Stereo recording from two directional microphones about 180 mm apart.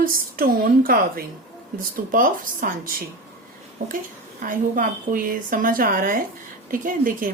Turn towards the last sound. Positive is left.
turn(degrees=-50)  # may be behind; listen again after turning